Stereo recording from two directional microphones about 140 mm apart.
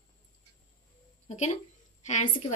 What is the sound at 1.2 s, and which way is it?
A woman's voice, 55° left (ahead or behind).